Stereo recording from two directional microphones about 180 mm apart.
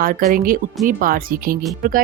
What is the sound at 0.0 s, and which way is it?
Speech, 55° right (ahead or behind).